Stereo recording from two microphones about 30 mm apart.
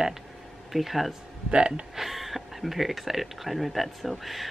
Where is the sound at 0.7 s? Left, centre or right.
Centre.